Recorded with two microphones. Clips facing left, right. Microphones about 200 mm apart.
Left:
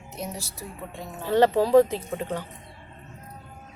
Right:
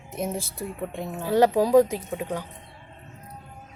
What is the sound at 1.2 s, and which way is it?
Speech, 10° right (ahead or behind).